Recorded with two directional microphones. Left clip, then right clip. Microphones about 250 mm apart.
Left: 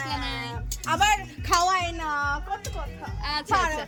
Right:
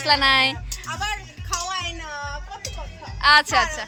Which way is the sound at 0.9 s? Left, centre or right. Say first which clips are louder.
Left 6 dB; left.